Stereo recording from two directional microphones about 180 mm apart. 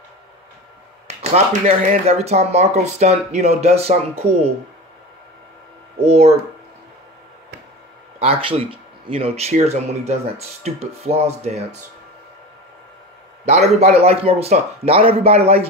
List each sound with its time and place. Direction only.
1.0 s speech: 35° right (ahead or behind)
6.0 s speech: 35° right (ahead or behind)
8.2 s speech: 35° right (ahead or behind)
13.5 s speech: 35° right (ahead or behind)